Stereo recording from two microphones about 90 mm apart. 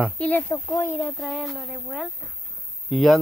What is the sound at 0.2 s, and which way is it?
Speech, 20° left (ahead or behind).